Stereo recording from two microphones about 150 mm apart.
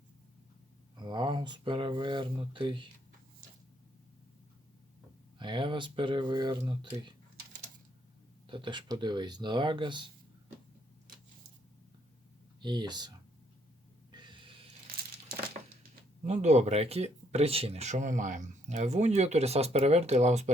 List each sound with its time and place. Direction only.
0.9 s speech: 30° right (ahead or behind)
5.4 s speech: 30° right (ahead or behind)
8.4 s speech: 30° right (ahead or behind)
12.6 s speech: 30° right (ahead or behind)
14.1 s a sound: 30° right (ahead or behind)
16.2 s speech: 45° right (ahead or behind)